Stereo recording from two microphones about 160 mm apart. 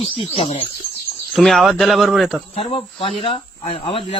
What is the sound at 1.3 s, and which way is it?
Speech, centre (ahead or behind).